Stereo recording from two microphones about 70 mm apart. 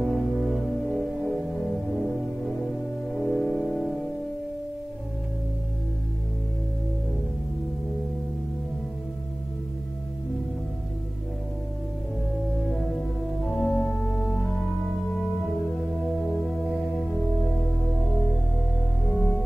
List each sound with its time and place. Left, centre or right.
0.0 s music: centre
13.7 s music: centre
16.2 s music: centre
19.0 s music: centre